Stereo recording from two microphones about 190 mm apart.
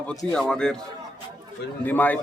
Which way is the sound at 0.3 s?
5° left (ahead or behind).